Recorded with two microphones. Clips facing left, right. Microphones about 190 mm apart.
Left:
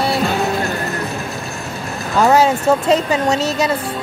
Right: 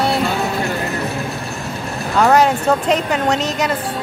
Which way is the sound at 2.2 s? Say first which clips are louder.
Even; 5° left (ahead or behind).